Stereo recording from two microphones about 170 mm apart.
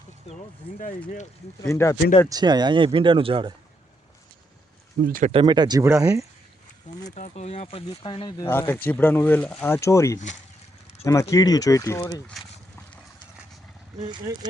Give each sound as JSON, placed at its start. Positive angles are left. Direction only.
{"t": 0.3, "sound": "speech", "side_deg": 35}
{"t": 1.6, "sound": "speech", "side_deg": 15}
{"t": 2.3, "sound": "speech", "side_deg": -25}
{"t": 5.0, "sound": "speech", "side_deg": -55}
{"t": 5.3, "sound": "speech", "side_deg": -30}
{"t": 6.9, "sound": "speech", "side_deg": 45}
{"t": 8.4, "sound": "speech", "side_deg": 10}
{"t": 14.0, "sound": "speech", "side_deg": -25}